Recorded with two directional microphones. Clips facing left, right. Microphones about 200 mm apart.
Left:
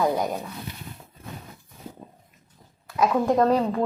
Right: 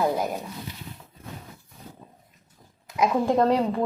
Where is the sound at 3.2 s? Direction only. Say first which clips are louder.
Left 1 dB; 30° right (ahead or behind).